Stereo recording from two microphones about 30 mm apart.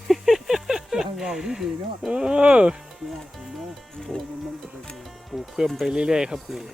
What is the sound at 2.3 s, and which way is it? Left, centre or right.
Speech, right.